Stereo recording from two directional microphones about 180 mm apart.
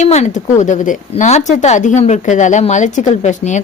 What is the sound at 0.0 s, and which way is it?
A woman's voice, 40° left (ahead or behind).